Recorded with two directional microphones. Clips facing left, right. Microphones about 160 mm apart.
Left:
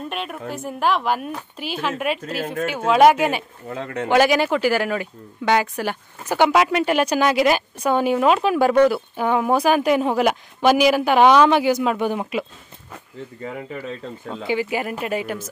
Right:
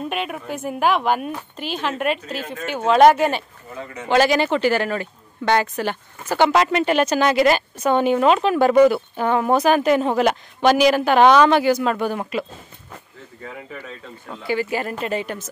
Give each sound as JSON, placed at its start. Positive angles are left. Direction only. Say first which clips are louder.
{"t": 0.1, "sound": "speech", "louder": "right 2 dB", "side_deg": -5}
{"t": 3.6, "sound": "speech", "louder": "left 6 dB", "side_deg": 75}
{"t": 4.1, "sound": "speech", "louder": "even", "side_deg": 10}
{"t": 14.3, "sound": "speech", "louder": "even", "side_deg": 20}